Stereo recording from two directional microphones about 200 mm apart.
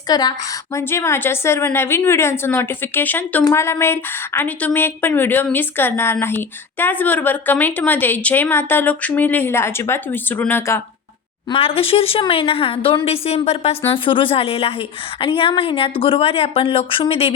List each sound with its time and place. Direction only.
0.1 s a woman's voice: 20° left (ahead or behind)
11.4 s speech: 25° left (ahead or behind)